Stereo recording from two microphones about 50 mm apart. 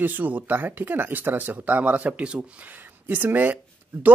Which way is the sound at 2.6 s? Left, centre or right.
Right.